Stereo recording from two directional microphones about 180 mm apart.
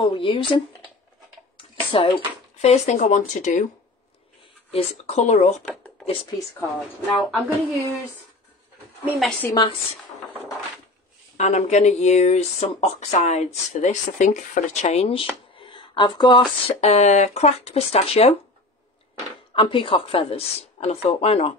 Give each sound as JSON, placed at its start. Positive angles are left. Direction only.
{"t": 0.0, "sound": "speech", "side_deg": 30}
{"t": 1.9, "sound": "speech", "side_deg": 30}
{"t": 4.6, "sound": "speech", "side_deg": 35}
{"t": 5.7, "sound": "a sound", "side_deg": 10}
{"t": 6.0, "sound": "speech", "side_deg": 30}
{"t": 7.1, "sound": "speech", "side_deg": 0}
{"t": 9.4, "sound": "speech", "side_deg": 20}
{"t": 11.3, "sound": "speech", "side_deg": 40}
{"t": 16.8, "sound": "speech", "side_deg": 40}
{"t": 19.5, "sound": "speech", "side_deg": 30}